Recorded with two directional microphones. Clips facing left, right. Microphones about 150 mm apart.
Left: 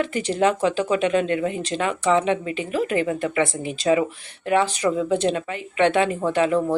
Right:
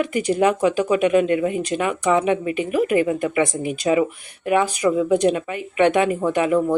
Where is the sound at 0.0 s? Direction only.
10° right (ahead or behind).